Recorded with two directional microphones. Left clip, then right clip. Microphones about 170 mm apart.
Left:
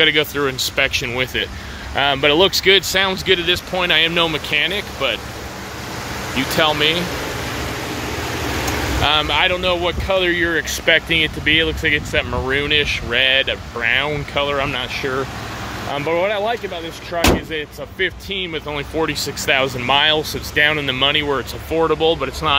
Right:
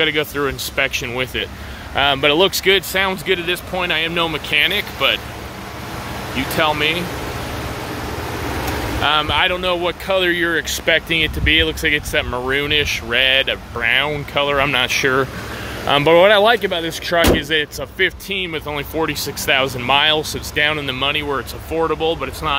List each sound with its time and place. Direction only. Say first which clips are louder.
0.0 s speech: left 2 dB; 5° left (ahead or behind)
6.3 s speech: left 1 dB; 15° left (ahead or behind)
9.0 s speech: even; 10° left (ahead or behind); by 15.2 s 35° right (ahead or behind)
15.9 s speech: right 8 dB; 65° right (ahead or behind)
17.4 s speech: right 7 dB; 35° right (ahead or behind)
17.9 s speech: right 2 dB; 15° right (ahead or behind); by 22.6 s 30° left (ahead or behind)